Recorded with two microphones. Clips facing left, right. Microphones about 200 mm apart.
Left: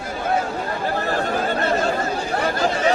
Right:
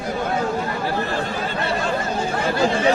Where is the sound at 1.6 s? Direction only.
45° left (ahead or behind).